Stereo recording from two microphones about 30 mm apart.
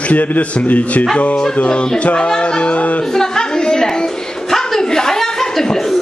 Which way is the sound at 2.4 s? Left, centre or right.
Left.